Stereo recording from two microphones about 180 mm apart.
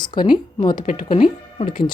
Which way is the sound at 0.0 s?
25° left (ahead or behind).